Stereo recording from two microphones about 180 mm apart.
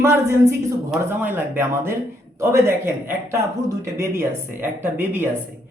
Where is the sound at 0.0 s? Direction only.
15° right (ahead or behind).